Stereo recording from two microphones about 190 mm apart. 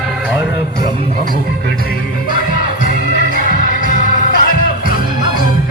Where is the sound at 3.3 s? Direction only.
45° left (ahead or behind).